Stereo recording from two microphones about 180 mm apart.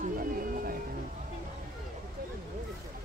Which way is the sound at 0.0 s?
50° right (ahead or behind).